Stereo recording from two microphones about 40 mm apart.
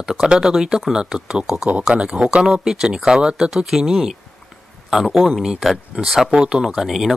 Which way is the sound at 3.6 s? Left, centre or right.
Centre.